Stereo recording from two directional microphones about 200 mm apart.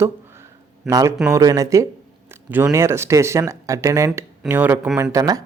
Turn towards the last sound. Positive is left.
turn(degrees=-20)  # may be behind; listen again after turning